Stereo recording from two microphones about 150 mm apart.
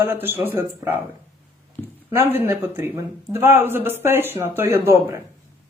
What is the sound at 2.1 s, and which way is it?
Speech, 15° right (ahead or behind).